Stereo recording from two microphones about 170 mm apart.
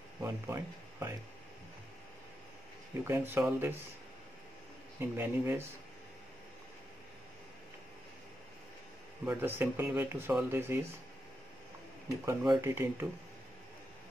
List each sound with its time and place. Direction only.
0.2 s speech: 15° right (ahead or behind)
3.0 s speech: 15° right (ahead or behind)
5.1 s speech: 15° right (ahead or behind)
9.2 s speech: 10° right (ahead or behind)
12.3 s speech: 15° right (ahead or behind)